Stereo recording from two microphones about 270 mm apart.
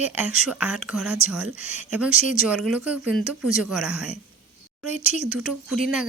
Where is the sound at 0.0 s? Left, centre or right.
Centre.